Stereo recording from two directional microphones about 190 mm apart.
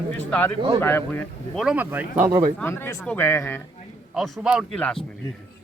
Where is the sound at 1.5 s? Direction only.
5° right (ahead or behind).